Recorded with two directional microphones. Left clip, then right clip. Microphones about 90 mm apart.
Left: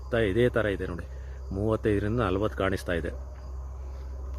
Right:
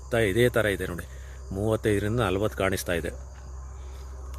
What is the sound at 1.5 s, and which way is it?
Speech, 5° right (ahead or behind).